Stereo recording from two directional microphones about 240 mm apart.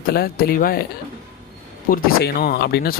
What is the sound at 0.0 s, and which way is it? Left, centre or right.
Speech, left.